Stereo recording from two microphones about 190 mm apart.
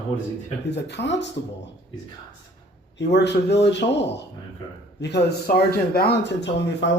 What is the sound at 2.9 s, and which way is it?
Speech, 65° left (ahead or behind).